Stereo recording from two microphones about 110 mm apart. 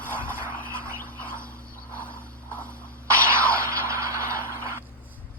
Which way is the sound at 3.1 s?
25° right (ahead or behind).